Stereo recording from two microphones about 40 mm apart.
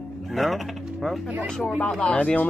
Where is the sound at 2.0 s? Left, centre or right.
Left.